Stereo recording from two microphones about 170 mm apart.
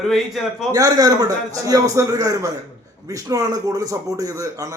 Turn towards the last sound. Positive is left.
turn(degrees=-20)  # may be behind; listen again after turning